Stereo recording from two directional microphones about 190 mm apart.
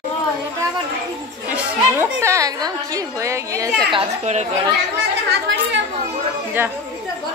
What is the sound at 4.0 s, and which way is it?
Speech, 35° right (ahead or behind).